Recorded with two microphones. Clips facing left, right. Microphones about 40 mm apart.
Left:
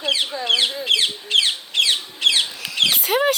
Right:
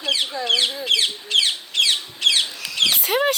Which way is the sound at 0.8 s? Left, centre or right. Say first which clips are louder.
Left 1 dB; centre.